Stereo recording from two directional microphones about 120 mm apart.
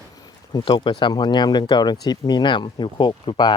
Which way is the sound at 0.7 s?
40° left (ahead or behind).